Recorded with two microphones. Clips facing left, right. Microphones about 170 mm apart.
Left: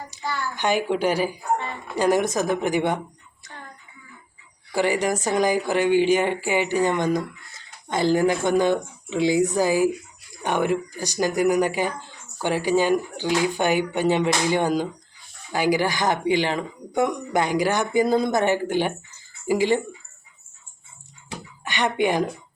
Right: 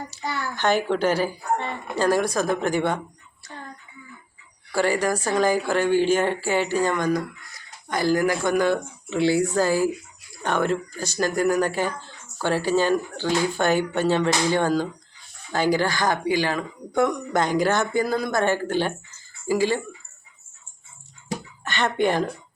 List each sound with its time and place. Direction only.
0.1 s a child's voice: 15° left (ahead or behind)
4.7 s speech: 15° left (ahead or behind)
21.6 s speech: 15° left (ahead or behind)